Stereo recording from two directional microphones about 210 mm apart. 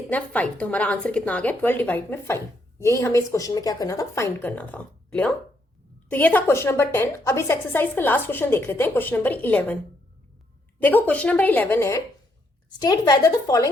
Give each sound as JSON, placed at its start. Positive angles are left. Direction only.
{"t": 0.1, "sound": "a woman's voice", "side_deg": 5}
{"t": 10.8, "sound": "a woman's voice", "side_deg": 10}